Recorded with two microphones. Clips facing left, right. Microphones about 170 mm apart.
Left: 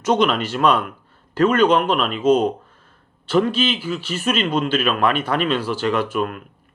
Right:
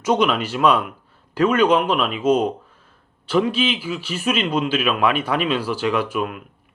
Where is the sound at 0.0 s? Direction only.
10° right (ahead or behind).